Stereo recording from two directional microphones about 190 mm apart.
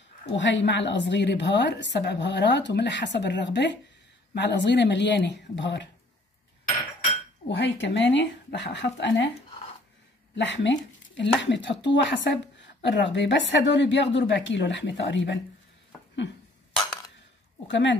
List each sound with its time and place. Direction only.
0.3 s a woman's voice: 70° left (ahead or behind)
7.4 s a woman's voice: 70° left (ahead or behind)
10.3 s a woman's voice: 70° left (ahead or behind)
17.6 s a woman's voice: 70° left (ahead or behind)